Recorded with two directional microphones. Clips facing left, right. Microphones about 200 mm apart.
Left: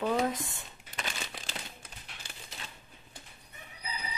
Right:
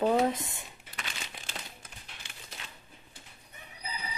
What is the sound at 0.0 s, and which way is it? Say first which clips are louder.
Speech: right 3 dB; 25° right (ahead or behind).